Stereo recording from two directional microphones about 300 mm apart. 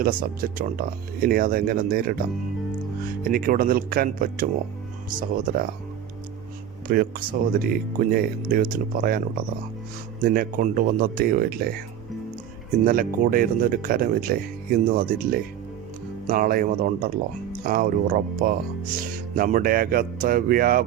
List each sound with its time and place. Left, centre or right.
0.0 s speech: right
3.2 s speech: right
6.8 s speech: right
10.2 s speech: right
12.8 s speech: right